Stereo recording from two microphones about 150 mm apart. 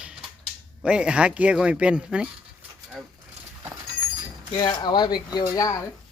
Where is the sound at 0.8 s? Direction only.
5° right (ahead or behind).